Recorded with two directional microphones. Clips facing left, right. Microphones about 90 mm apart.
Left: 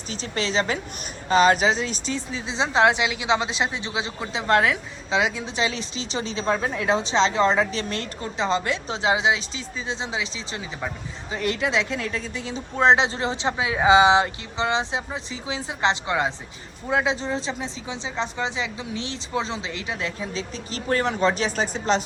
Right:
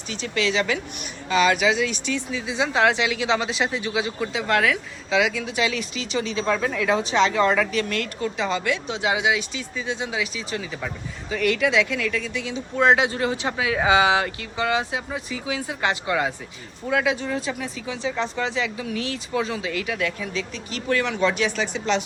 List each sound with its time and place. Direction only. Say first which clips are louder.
0.1 s speech: right 2 dB; 35° left (ahead or behind)